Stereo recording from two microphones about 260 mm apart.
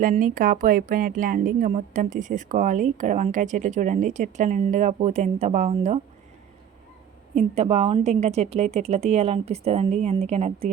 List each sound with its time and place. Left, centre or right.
0.0 s speech: right
7.3 s speech: right